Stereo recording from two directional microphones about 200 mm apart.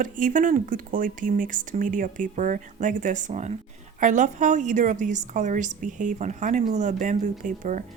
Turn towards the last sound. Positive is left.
turn(degrees=-40)  # may be behind; listen again after turning